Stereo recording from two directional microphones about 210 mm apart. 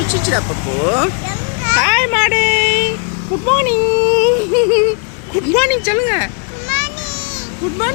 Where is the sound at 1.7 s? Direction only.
5° right (ahead or behind).